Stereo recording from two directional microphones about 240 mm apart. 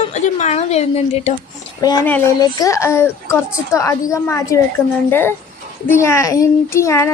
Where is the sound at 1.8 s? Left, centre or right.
Centre.